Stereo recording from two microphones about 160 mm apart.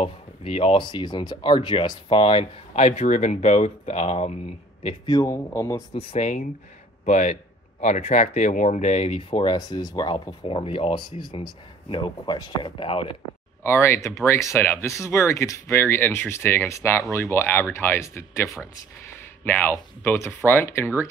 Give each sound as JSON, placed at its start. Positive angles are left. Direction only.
{"t": 0.0, "sound": "speech", "side_deg": 35}
{"t": 4.8, "sound": "speech", "side_deg": 25}
{"t": 5.9, "sound": "speech", "side_deg": 45}
{"t": 13.7, "sound": "speech", "side_deg": 15}